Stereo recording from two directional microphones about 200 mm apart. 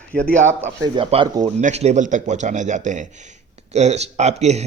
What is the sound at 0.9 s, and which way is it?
Speech, 25° right (ahead or behind).